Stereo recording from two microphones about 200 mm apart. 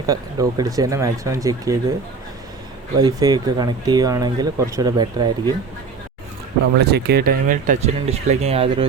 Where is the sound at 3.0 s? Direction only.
20° right (ahead or behind).